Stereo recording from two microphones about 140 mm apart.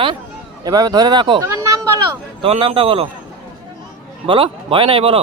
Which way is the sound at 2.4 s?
40° right (ahead or behind).